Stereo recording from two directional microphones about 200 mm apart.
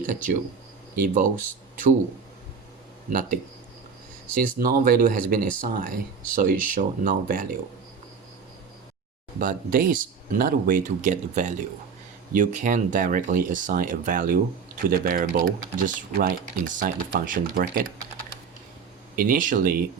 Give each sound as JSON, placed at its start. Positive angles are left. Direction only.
{"t": 0.0, "sound": "speech", "side_deg": -40}
{"t": 3.1, "sound": "speech", "side_deg": -45}
{"t": 4.4, "sound": "speech", "side_deg": -45}
{"t": 9.4, "sound": "speech", "side_deg": -45}
{"t": 19.1, "sound": "speech", "side_deg": -45}